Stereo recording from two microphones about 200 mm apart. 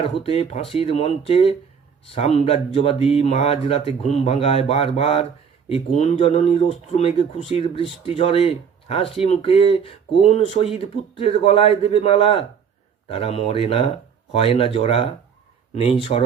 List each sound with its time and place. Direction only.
0.2 s speech: 30° left (ahead or behind)